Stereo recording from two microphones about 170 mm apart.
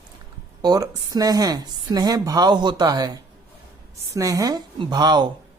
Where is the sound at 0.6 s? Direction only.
20° right (ahead or behind).